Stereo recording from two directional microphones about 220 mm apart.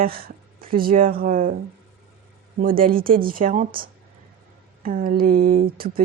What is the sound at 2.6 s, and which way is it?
Speech, 40° right (ahead or behind).